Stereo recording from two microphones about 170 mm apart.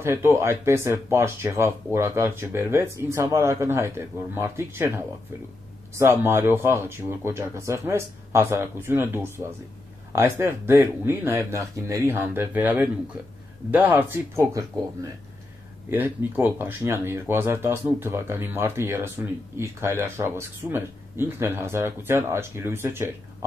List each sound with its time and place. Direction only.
0.0 s speech: 15° right (ahead or behind)
15.9 s speech: 10° right (ahead or behind)